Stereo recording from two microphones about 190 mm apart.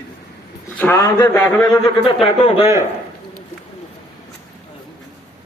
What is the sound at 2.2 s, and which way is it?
Speech, 30° left (ahead or behind).